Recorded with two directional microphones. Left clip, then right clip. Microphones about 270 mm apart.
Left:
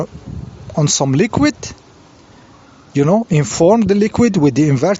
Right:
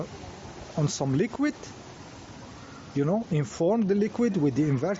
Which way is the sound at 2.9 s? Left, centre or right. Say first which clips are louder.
Left 13 dB; left.